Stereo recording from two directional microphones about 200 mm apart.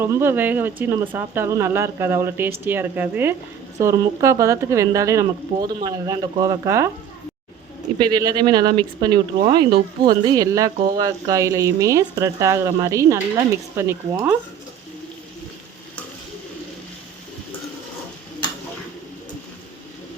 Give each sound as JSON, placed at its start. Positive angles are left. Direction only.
{"t": 0.0, "sound": "speech", "side_deg": -10}
{"t": 7.9, "sound": "speech", "side_deg": -20}